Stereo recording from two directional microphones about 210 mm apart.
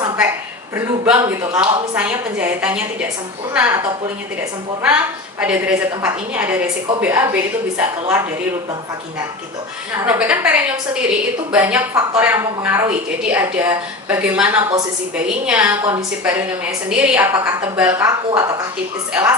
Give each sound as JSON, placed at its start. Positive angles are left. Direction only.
{"t": 0.7, "sound": "a woman's voice", "side_deg": -10}
{"t": 4.8, "sound": "a woman's voice", "side_deg": -5}
{"t": 9.9, "sound": "a woman's voice", "side_deg": -5}